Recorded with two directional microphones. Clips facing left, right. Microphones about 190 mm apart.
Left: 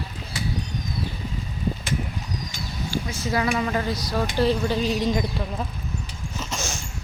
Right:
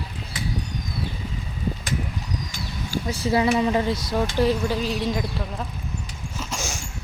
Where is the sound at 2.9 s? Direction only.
35° right (ahead or behind); by 5.6 s centre (ahead or behind).